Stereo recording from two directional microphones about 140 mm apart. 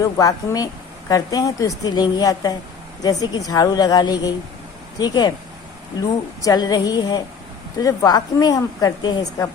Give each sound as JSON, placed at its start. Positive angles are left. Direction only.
{"t": 0.2, "sound": "speech", "side_deg": 25}
{"t": 6.4, "sound": "speech", "side_deg": 30}